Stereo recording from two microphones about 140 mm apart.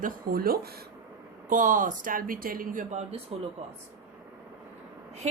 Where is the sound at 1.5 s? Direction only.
65° right (ahead or behind); by 2.8 s 90° right.